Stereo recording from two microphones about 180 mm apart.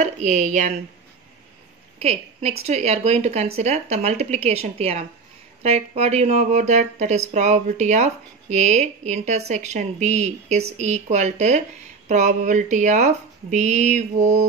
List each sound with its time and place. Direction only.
0.0 s speech: 40° right (ahead or behind)
2.0 s a woman's voice: 35° right (ahead or behind)